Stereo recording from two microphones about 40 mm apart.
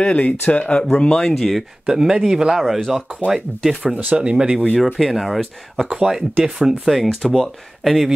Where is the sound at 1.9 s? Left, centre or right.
Centre.